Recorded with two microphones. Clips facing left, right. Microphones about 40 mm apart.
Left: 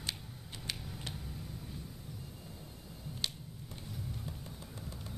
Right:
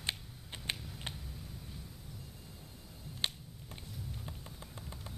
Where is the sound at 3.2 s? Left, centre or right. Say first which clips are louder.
Right 2 dB; right.